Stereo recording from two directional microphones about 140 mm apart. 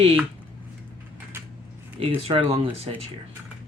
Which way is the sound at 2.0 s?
45° right (ahead or behind).